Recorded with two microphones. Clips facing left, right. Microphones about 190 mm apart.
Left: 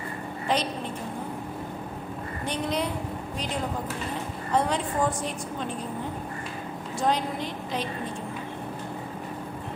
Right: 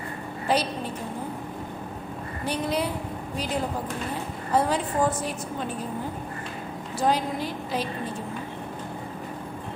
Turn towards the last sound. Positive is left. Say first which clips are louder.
# right 2 dB
turn(degrees=-5)  # may be behind; listen again after turning